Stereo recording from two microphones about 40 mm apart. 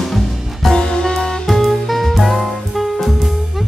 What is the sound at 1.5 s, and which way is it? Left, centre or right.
Music, centre.